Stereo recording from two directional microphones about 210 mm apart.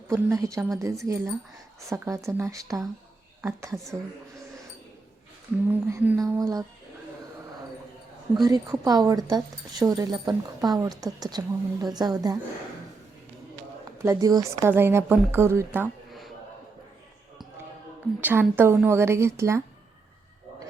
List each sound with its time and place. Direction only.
0.1 s speech: 15° right (ahead or behind)
5.7 s speech: 10° right (ahead or behind)
8.4 s speech: 20° right (ahead or behind)
14.0 s speech: 15° right (ahead or behind)
18.2 s speech: 10° right (ahead or behind)